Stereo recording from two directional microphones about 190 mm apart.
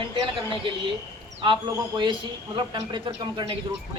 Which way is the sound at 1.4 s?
25° right (ahead or behind).